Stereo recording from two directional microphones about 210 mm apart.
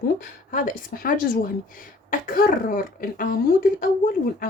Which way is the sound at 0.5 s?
40° left (ahead or behind).